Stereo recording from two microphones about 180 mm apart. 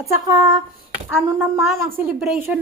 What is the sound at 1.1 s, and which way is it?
A woman's voice, 10° right (ahead or behind).